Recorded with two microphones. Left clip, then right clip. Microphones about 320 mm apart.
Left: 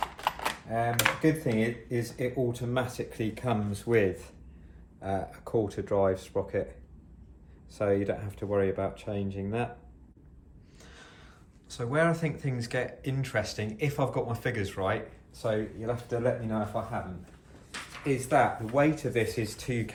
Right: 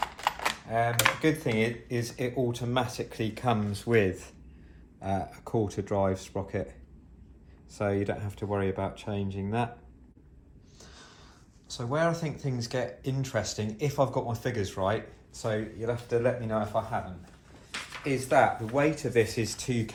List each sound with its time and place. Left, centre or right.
0.0 s speech: centre
3.4 s speech: right
7.8 s speech: right
10.8 s a sound: centre
11.7 s speech: centre
15.4 s speech: right
16.6 s speech: centre
17.9 s a sound: centre
18.3 s speech: right